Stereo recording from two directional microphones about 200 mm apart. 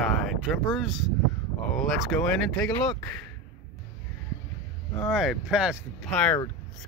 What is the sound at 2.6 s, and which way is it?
Speech, 20° left (ahead or behind).